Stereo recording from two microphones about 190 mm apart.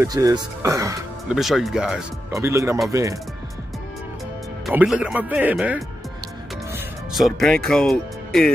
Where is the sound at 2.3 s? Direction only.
15° right (ahead or behind).